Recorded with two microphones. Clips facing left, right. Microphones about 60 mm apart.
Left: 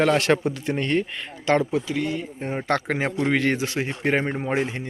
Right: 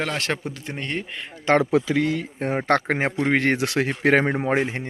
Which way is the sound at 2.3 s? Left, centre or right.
Right.